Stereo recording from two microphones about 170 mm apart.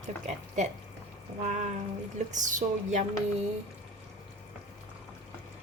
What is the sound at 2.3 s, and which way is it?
Speech, 45° right (ahead or behind).